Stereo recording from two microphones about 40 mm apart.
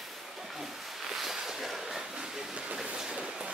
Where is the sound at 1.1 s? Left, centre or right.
Centre.